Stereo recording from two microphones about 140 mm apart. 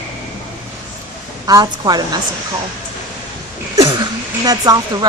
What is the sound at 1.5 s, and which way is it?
Speech, 30° right (ahead or behind).